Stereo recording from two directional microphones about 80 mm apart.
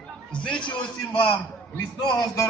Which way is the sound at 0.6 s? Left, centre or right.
Left.